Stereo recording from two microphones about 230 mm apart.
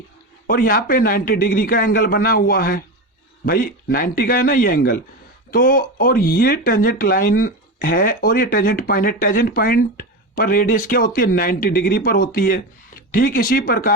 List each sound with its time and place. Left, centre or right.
0.4 s speech: left